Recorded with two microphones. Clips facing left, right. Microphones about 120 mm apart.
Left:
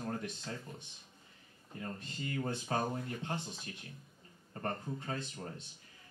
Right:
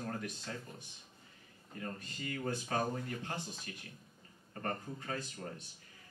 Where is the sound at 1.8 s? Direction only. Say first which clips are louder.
Left 1 dB; 30° left (ahead or behind).